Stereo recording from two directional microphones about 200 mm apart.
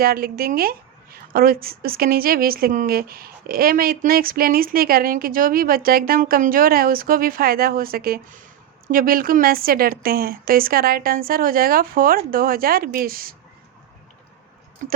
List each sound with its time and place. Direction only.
0.0 s a woman's voice: 50° right (ahead or behind)